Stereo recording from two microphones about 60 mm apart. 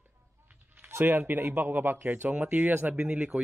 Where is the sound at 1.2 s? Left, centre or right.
Right.